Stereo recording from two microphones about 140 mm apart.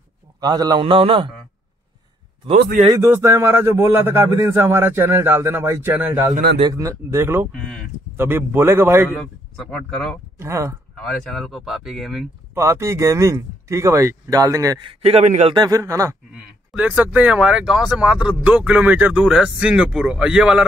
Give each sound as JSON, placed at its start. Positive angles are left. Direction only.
{"t": 0.4, "sound": "a man's voice", "side_deg": -30}
{"t": 2.9, "sound": "a man's voice", "side_deg": -20}
{"t": 7.5, "sound": "a sound", "side_deg": 5}
{"t": 8.2, "sound": "a man's voice", "side_deg": -15}
{"t": 9.6, "sound": "speech", "side_deg": 5}
{"t": 10.4, "sound": "speech", "side_deg": -20}
{"t": 11.0, "sound": "speech", "side_deg": 5}
{"t": 12.5, "sound": "speech", "side_deg": -20}
{"t": 14.9, "sound": "a man's voice", "side_deg": -45}
{"t": 15.5, "sound": "speech", "side_deg": -25}
{"t": 16.7, "sound": "a man's voice", "side_deg": -10}